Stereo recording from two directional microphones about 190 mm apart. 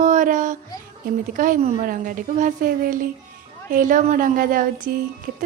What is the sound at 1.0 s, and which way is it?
Speech, 45° right (ahead or behind).